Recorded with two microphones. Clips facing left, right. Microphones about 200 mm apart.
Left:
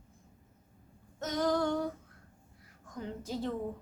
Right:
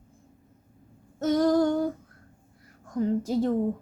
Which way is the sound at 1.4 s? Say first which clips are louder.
Right 7 dB; 40° right (ahead or behind).